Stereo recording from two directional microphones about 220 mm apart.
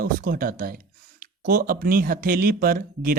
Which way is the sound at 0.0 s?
40° right (ahead or behind).